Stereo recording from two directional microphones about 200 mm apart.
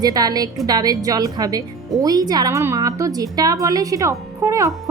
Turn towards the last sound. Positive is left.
turn(degrees=-15)  # may be behind; listen again after turning